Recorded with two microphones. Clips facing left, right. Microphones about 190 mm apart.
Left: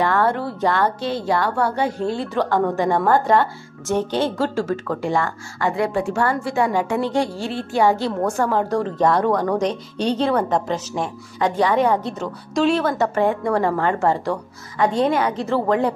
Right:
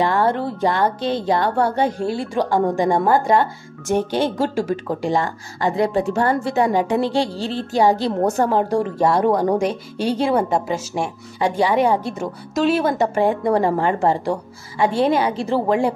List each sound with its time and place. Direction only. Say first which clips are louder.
0.1 s a woman's voice: right 1 dB; 15° right (ahead or behind)
2.0 s speech: right 1 dB; 10° right (ahead or behind)
5.6 s speech: right 2 dB; 35° right (ahead or behind)
6.1 s a woman's voice: right 2 dB; 20° right (ahead or behind)
7.1 s speech: right 1 dB; 35° right (ahead or behind)
8.2 s speech: right 2 dB; 20° right (ahead or behind)